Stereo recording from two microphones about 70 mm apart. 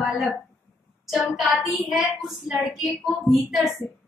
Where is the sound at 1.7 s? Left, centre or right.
Centre.